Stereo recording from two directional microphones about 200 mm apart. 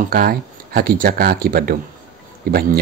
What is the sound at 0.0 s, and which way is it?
Speech, 45° right (ahead or behind).